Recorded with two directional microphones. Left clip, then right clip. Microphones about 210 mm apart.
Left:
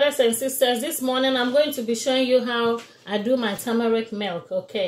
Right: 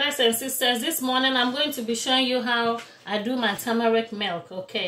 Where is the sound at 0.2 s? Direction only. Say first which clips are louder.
Left 3 dB; 20° right (ahead or behind).